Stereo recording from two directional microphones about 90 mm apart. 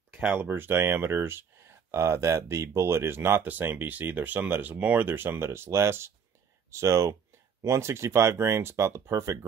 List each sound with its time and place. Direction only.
0.3 s speech: 20° right (ahead or behind)